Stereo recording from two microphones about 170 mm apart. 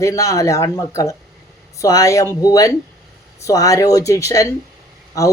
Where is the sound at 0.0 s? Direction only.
20° left (ahead or behind).